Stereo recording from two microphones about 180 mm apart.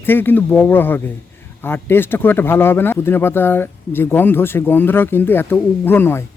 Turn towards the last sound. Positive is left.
turn(degrees=10)  # may be behind; listen again after turning